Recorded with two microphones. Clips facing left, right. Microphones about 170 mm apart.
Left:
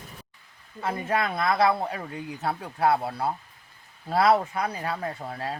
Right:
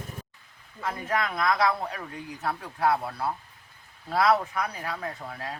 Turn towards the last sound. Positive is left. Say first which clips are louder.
# left 3 dB
turn(degrees=30)  # may be behind; listen again after turning